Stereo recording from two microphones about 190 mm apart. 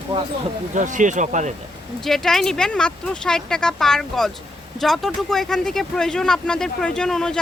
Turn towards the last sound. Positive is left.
turn(degrees=5)  # may be behind; listen again after turning